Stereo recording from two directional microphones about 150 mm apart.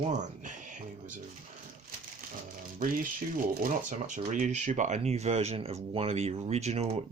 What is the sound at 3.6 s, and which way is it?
Speech, 60° right (ahead or behind).